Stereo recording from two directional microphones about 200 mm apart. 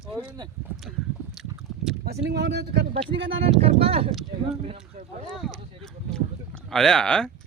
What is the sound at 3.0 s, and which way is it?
Speech, 25° right (ahead or behind).